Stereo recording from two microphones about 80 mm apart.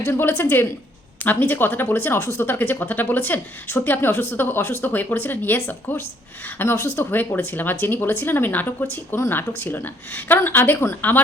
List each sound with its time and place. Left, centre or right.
0.0 s speech: left